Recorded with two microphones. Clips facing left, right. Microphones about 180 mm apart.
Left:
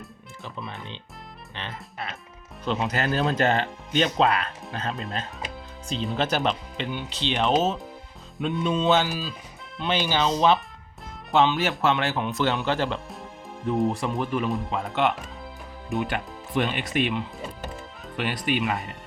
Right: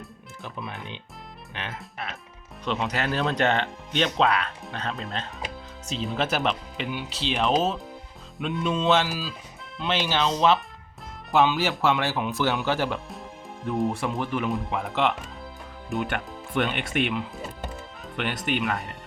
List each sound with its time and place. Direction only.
1.5 s speech: centre (ahead or behind)
14.2 s speech: 20° left (ahead or behind)
14.5 s speech: centre (ahead or behind)